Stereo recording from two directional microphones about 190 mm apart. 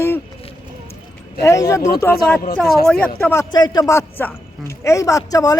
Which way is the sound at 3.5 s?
20° left (ahead or behind).